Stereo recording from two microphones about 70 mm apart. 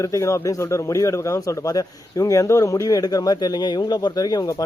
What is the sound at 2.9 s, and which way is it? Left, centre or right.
Speech, left.